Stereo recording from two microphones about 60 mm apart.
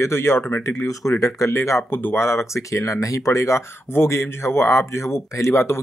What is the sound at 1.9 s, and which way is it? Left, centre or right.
Speech, left.